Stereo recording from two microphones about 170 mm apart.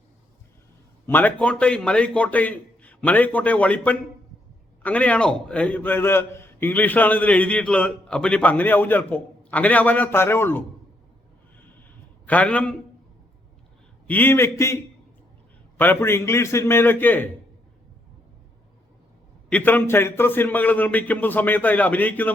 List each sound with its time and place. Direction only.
1.0 s a man's voice: 10° left (ahead or behind)
11.8 s a sound: 10° left (ahead or behind)
14.1 s a man's voice: 10° left (ahead or behind)
15.8 s a man's voice: 15° left (ahead or behind)
19.5 s a man's voice: 10° left (ahead or behind)